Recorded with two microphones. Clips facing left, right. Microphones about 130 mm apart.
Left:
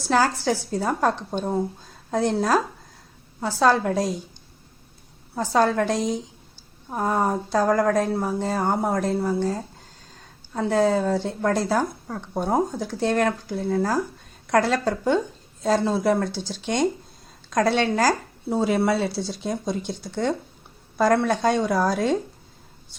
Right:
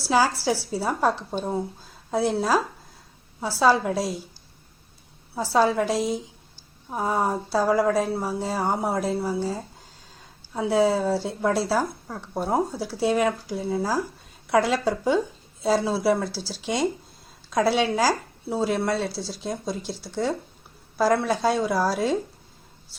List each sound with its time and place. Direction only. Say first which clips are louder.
0.0 s a woman's voice: left 1 dB; 5° right (ahead or behind)
5.3 s a woman's voice: even; 5° right (ahead or behind)